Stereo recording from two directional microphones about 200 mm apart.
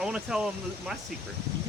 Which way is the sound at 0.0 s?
5° right (ahead or behind).